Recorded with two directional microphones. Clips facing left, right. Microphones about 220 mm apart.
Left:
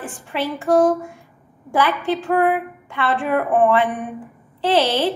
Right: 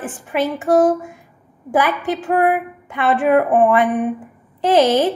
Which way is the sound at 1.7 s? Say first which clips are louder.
Right 1 dB; 15° right (ahead or behind).